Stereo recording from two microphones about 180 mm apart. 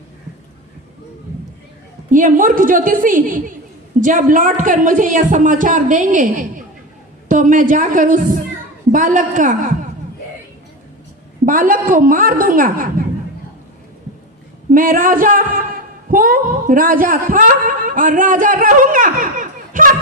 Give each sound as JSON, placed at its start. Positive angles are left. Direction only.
{"t": 2.0, "sound": "a woman's voice", "side_deg": -45}
{"t": 11.4, "sound": "a woman's voice", "side_deg": -50}
{"t": 14.7, "sound": "a woman's voice", "side_deg": -50}